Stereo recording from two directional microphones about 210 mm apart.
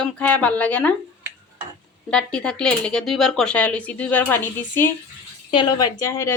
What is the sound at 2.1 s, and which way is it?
Speech, 5° left (ahead or behind).